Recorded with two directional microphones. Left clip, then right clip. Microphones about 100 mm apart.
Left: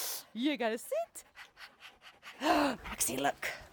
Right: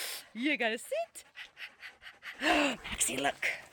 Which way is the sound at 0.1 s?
25° left (ahead or behind).